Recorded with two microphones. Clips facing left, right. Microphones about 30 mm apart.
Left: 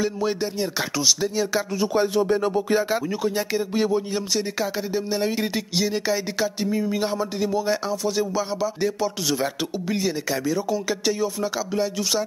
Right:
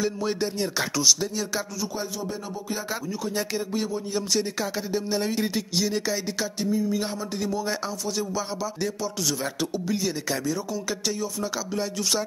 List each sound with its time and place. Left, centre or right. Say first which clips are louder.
0.0 s speech: left 2 dB; centre
1.8 s speech: left 10 dB; left
2.9 s speech: left 6 dB; left
4.3 s speech: left 2 dB; centre
6.7 s speech: left 1 dB; left
7.0 s speech: left 5 dB; centre